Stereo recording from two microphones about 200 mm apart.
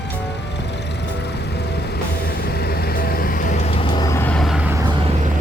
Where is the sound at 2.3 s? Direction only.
55° left (ahead or behind); by 4.8 s 10° right (ahead or behind).